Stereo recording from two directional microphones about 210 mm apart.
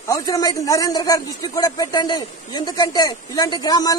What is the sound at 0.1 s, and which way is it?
A man's voice, 15° left (ahead or behind).